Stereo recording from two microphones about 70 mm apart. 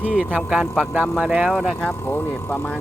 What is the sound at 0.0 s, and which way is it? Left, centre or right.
Speech, centre.